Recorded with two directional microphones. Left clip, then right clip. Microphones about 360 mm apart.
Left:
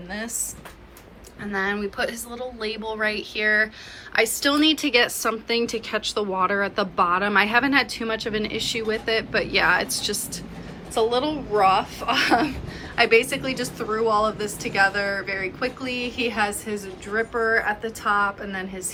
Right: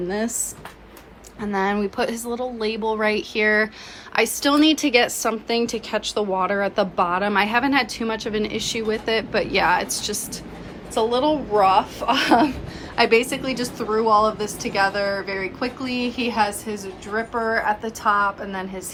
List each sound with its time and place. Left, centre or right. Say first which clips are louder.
0.1 s a woman's voice: right 2 dB; centre
1.4 s a woman's voice: right 3 dB; centre